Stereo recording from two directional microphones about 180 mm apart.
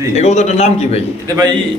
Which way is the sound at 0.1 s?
35° left (ahead or behind).